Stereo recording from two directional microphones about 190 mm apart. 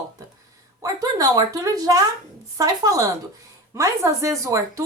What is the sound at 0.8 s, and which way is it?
A woman's voice, 20° right (ahead or behind).